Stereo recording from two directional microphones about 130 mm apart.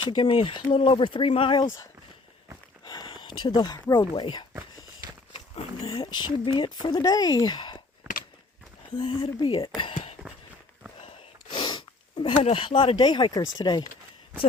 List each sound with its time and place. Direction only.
0.0 s speech: 35° left (ahead or behind)
2.8 s a sound: 35° left (ahead or behind)
4.1 s speech: 35° left (ahead or behind)
9.0 s speech: 45° left (ahead or behind)
11.0 s gasp: 40° left (ahead or behind)
12.2 s speech: 45° left (ahead or behind)